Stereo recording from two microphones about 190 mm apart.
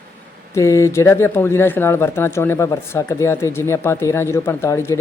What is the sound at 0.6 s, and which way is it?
Speech, 15° left (ahead or behind).